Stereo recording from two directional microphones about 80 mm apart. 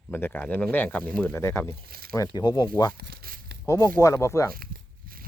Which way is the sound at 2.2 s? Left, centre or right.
Left.